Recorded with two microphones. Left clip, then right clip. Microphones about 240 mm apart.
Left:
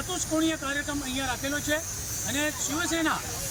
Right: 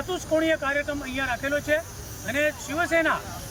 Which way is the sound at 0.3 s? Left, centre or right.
Centre.